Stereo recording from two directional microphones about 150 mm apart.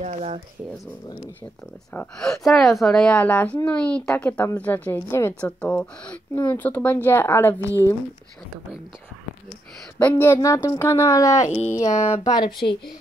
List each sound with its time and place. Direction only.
0.0 s speech: 45° right (ahead or behind)
2.0 s a woman's voice: centre (ahead or behind)
9.9 s a woman's voice: 10° left (ahead or behind); by 12.9 s 35° left (ahead or behind)